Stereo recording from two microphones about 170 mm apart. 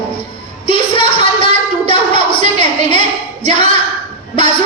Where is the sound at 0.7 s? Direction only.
30° left (ahead or behind).